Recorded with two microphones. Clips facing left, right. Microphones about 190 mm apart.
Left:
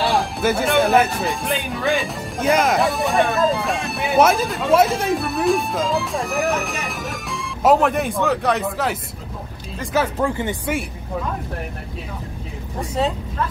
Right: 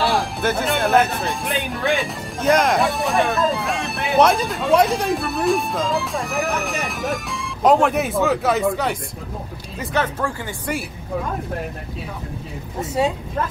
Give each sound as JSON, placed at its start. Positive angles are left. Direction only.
{"t": 0.0, "sound": "speech", "side_deg": 0}
{"t": 10.2, "sound": "speech", "side_deg": 20}
{"t": 13.0, "sound": "speech", "side_deg": -10}